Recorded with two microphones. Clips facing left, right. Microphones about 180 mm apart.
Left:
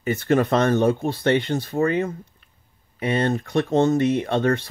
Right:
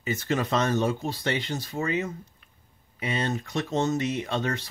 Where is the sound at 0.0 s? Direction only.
55° left (ahead or behind).